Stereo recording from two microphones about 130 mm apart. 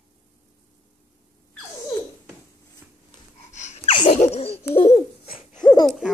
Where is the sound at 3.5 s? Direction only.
65° left (ahead or behind).